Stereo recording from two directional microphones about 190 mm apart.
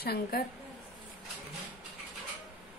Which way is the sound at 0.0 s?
55° left (ahead or behind).